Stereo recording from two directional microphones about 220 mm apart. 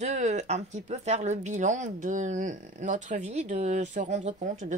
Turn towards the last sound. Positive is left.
turn(degrees=-35)  # may be behind; listen again after turning